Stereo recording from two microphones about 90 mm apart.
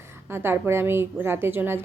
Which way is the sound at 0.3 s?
25° right (ahead or behind).